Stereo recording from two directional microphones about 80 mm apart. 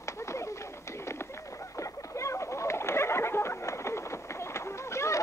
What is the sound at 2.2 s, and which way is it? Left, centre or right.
Bird, left.